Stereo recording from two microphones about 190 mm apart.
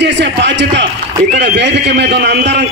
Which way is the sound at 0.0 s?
65° right (ahead or behind).